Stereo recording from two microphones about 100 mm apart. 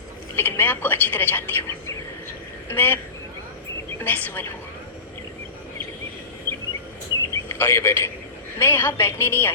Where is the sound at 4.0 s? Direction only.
20° left (ahead or behind).